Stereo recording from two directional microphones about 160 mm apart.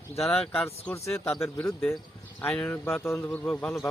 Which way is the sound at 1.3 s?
5° left (ahead or behind).